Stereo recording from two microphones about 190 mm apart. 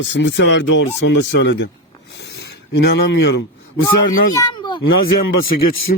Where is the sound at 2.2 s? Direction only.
60° left (ahead or behind).